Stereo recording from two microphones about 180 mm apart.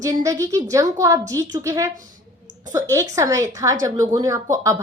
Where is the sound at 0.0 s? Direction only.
20° right (ahead or behind).